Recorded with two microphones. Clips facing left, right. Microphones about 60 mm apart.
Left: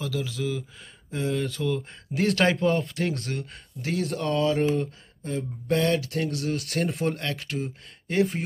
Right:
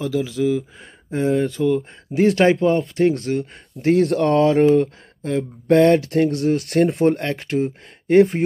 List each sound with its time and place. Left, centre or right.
0.0 s speech: centre
3.8 s speech: right
5.9 s speech: right